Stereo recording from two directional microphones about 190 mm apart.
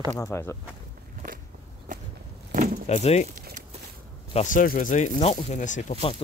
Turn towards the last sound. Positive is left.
turn(degrees=30)  # may be behind; listen again after turning